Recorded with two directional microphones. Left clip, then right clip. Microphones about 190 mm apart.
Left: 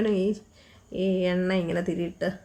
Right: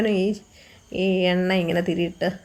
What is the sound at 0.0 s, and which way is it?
Speech, 5° right (ahead or behind).